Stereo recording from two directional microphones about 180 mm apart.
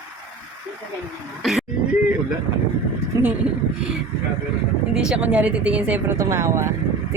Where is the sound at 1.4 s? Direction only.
Centre (ahead or behind).